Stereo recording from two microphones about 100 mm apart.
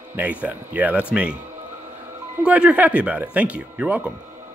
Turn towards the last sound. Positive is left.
turn(degrees=-10)  # may be behind; listen again after turning